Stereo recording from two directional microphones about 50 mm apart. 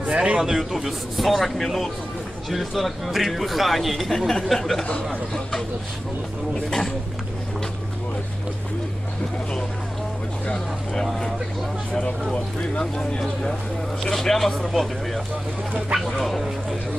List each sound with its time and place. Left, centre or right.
0.1 s speech: right
0.3 s a man's voice: centre
14.0 s a man's voice: centre